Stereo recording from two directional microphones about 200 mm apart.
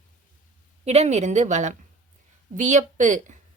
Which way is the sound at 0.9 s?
35° right (ahead or behind).